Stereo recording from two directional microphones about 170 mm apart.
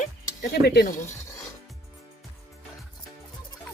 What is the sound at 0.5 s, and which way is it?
Speech, 70° left (ahead or behind).